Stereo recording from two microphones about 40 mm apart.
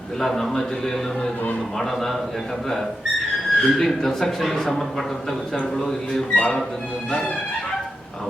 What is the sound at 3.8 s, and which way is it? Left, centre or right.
A man's voice, centre.